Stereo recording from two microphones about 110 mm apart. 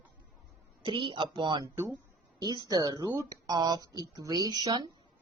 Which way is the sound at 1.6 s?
25° right (ahead or behind).